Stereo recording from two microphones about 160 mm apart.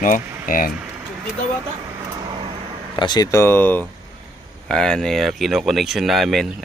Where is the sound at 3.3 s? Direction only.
15° left (ahead or behind).